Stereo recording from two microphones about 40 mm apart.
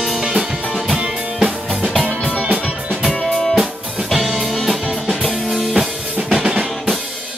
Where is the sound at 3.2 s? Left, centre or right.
Centre.